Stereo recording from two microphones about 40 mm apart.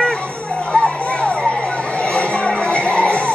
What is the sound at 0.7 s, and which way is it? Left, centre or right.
Children playing, left.